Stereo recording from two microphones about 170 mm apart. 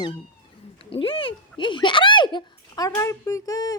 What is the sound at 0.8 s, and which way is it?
Speech, 30° left (ahead or behind).